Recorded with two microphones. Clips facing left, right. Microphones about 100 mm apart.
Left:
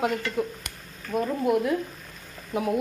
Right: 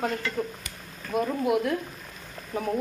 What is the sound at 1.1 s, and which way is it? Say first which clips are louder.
Speech: left 1 dB; 5° right (ahead or behind).